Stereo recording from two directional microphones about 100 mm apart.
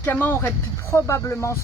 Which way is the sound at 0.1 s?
20° left (ahead or behind).